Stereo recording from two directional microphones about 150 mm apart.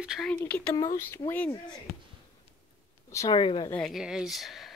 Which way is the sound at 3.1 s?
30° left (ahead or behind).